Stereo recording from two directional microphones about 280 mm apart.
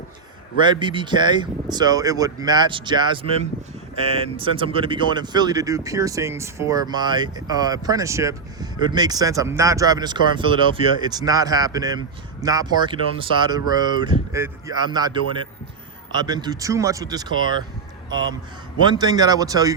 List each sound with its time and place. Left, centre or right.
0.6 s speech: centre